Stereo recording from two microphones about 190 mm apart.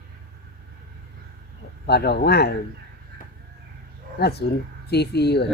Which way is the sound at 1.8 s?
60° left (ahead or behind).